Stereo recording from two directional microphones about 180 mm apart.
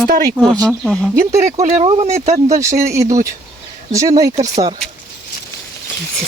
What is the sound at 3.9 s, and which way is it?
Speech, 20° right (ahead or behind).